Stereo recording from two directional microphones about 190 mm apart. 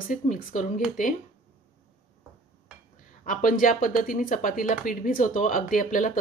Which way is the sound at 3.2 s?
45° left (ahead or behind).